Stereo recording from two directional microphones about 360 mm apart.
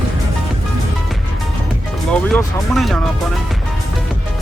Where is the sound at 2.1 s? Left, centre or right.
Centre.